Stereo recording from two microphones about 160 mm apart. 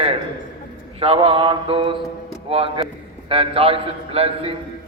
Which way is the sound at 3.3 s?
35° right (ahead or behind).